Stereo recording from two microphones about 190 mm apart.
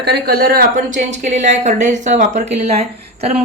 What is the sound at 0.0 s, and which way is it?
Speech, 60° right (ahead or behind).